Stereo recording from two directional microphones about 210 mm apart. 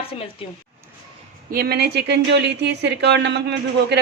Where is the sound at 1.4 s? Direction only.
45° right (ahead or behind).